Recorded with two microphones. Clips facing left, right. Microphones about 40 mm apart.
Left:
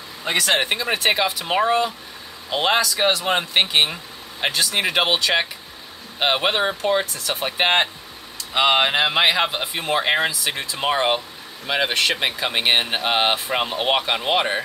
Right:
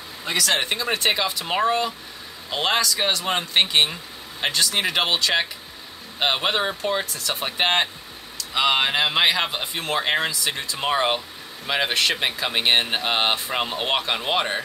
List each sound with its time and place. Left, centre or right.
0.2 s speech: left
0.5 s speech: centre